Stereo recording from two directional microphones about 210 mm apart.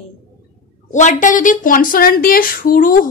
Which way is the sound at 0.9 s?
35° left (ahead or behind).